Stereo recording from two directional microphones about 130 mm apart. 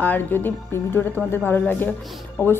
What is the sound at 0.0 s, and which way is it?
A woman's voice, 15° left (ahead or behind).